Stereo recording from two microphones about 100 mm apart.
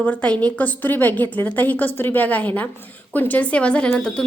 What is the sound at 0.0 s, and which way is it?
A woman's voice, 15° left (ahead or behind).